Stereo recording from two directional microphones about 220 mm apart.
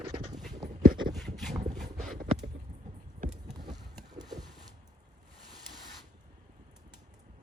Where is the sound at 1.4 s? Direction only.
Centre (ahead or behind).